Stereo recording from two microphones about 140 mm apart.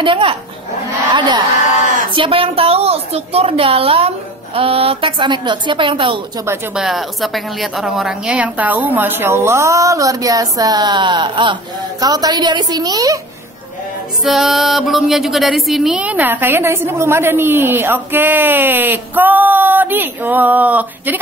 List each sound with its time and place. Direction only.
0.0 s a woman's voice: 40° right (ahead or behind)
2.1 s a woman's voice: 40° right (ahead or behind)
6.7 s a woman's voice: 5° right (ahead or behind); by 13.2 s 25° right (ahead or behind)
14.2 s speech: centre (ahead or behind)